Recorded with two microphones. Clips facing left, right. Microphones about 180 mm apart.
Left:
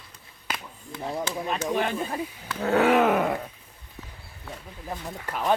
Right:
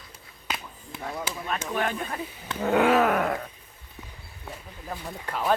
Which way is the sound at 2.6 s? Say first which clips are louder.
Even; 10° right (ahead or behind).